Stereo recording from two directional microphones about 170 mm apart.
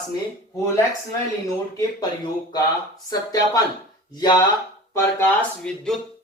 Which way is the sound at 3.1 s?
20° left (ahead or behind).